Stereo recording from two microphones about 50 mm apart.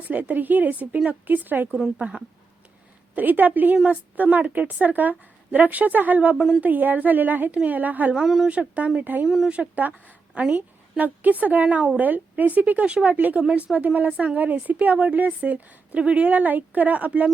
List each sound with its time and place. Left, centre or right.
0.1 s a woman's voice: right
2.0 s speech: right
3.2 s a woman's voice: right
8.1 s speech: centre
8.4 s a woman's voice: right
9.2 s speech: centre
9.5 s a woman's voice: right